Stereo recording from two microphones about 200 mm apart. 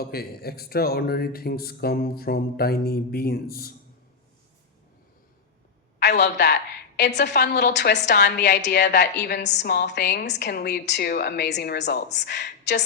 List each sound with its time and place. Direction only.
0.0 s speech: 50° left (ahead or behind)
6.0 s a woman's voice: 55° left (ahead or behind)